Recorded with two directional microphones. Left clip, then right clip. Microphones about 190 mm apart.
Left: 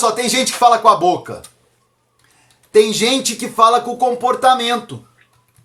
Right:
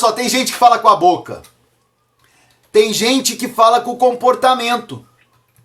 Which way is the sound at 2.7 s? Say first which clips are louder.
Even; 20° right (ahead or behind).